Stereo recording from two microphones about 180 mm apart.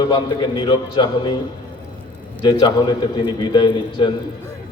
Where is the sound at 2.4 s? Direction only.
25° left (ahead or behind).